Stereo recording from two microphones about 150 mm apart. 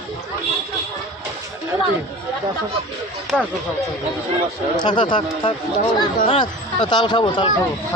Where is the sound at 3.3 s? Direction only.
10° left (ahead or behind).